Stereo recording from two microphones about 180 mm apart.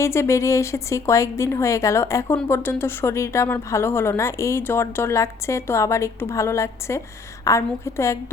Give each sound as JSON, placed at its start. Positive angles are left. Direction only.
{"t": 0.0, "sound": "a woman's voice", "side_deg": 15}